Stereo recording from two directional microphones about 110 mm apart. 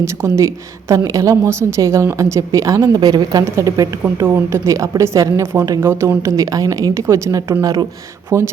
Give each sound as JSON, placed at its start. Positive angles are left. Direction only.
{"t": 0.0, "sound": "a woman's voice", "side_deg": -25}